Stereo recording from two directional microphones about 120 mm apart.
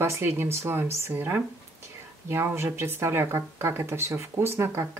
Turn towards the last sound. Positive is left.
turn(degrees=-20)  # may be behind; listen again after turning